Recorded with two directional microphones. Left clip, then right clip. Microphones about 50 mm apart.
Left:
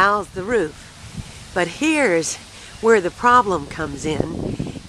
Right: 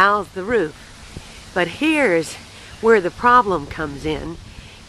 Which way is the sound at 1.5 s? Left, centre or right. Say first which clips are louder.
Right 1 dB; left.